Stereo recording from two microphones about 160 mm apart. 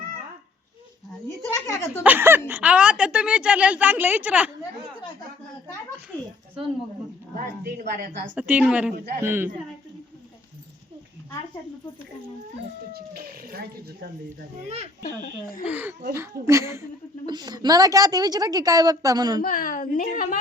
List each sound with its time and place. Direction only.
1.5 s a sound: 15° left (ahead or behind)
2.0 s a woman's voice: 15° right (ahead or behind)
7.3 s a woman's voice: 60° right (ahead or behind)
8.4 s a woman's voice: 10° right (ahead or behind)
12.9 s speech: 70° right (ahead or behind)
15.0 s a woman's voice: 60° left (ahead or behind)
15.6 s a woman's voice: 10° right (ahead or behind)
19.4 s a woman's voice: 60° left (ahead or behind)